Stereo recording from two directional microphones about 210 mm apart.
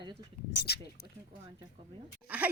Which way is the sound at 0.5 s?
50° left (ahead or behind).